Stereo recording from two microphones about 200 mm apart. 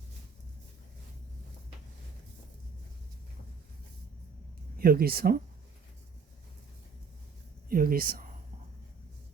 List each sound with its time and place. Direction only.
4.8 s speech: 50° right (ahead or behind)
7.7 s speech: 45° right (ahead or behind)